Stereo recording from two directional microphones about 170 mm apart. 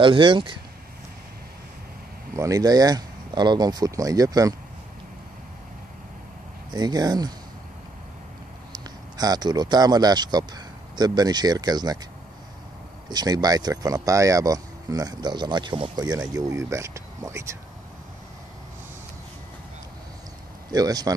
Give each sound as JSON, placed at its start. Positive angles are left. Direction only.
{"t": 0.0, "sound": "speech", "side_deg": -30}
{"t": 2.3, "sound": "speech", "side_deg": -20}
{"t": 6.7, "sound": "speech", "side_deg": -25}
{"t": 8.7, "sound": "speech", "side_deg": -25}
{"t": 13.1, "sound": "speech", "side_deg": -25}
{"t": 20.7, "sound": "speech", "side_deg": -20}